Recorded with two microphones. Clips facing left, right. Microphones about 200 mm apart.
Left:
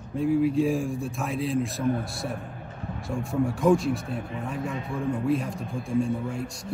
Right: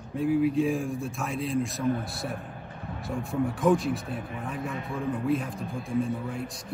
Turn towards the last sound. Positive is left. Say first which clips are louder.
# left 3 dB
turn(degrees=0)  # may be behind; listen again after turning